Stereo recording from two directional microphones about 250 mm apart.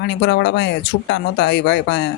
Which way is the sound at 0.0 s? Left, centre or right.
Left.